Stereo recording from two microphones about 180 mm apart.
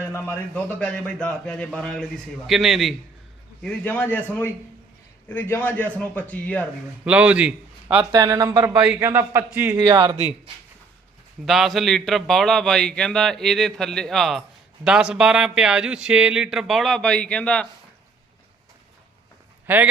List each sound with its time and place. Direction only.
0.0 s a man's voice: 10° left (ahead or behind)
7.0 s a man's voice: 5° right (ahead or behind)
8.1 s a man's voice: 20° right (ahead or behind)
11.4 s a man's voice: centre (ahead or behind)
19.6 s speech: 10° right (ahead or behind)